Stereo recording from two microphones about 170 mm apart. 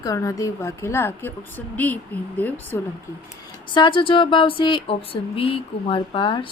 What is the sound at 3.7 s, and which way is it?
Speech, 30° left (ahead or behind).